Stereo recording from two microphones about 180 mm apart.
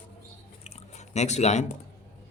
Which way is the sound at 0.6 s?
40° left (ahead or behind).